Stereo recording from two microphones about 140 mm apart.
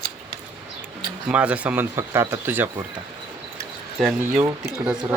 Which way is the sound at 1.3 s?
10° right (ahead or behind).